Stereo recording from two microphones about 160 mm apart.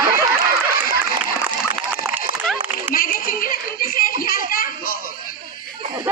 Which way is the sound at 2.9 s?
65° left (ahead or behind).